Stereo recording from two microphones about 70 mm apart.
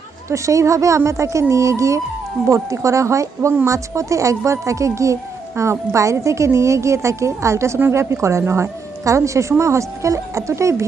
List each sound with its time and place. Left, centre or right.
0.3 s a woman's voice: right